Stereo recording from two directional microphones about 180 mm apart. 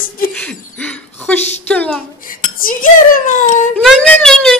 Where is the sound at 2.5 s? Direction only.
50° left (ahead or behind).